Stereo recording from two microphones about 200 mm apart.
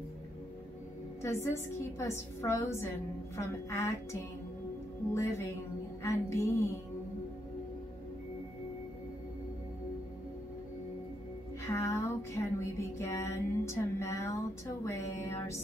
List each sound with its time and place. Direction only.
1.2 s music: 15° left (ahead or behind)
11.6 s music: 15° left (ahead or behind)